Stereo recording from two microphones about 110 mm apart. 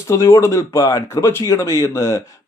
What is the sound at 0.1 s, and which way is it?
Speech, 25° left (ahead or behind).